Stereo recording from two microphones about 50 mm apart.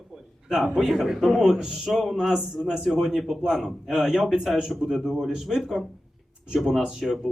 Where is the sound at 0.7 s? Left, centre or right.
Centre.